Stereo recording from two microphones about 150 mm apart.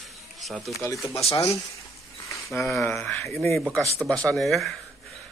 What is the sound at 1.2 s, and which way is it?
Speech, 45° left (ahead or behind).